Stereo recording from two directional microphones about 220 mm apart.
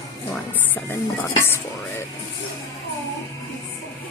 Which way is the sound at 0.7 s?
10° left (ahead or behind).